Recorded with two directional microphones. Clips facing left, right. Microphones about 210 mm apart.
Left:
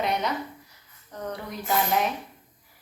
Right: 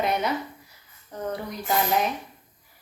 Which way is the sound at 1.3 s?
Centre (ahead or behind).